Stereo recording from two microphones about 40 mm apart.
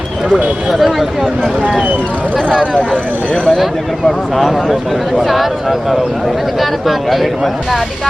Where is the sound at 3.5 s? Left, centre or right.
Centre.